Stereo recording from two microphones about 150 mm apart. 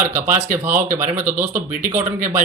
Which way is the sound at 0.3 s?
15° right (ahead or behind).